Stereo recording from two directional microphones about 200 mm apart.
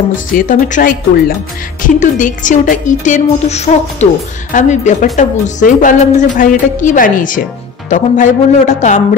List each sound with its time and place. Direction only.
0.3 s a woman's voice: 40° left (ahead or behind)